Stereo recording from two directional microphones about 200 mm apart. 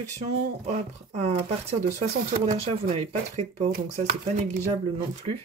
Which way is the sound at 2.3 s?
40° right (ahead or behind).